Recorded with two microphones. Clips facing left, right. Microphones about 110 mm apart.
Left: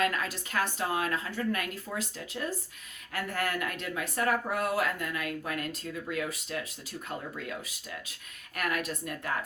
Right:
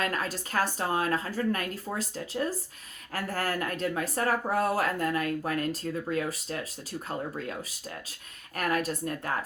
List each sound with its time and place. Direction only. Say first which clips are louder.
0.0 s speech: left 1 dB; 35° right (ahead or behind)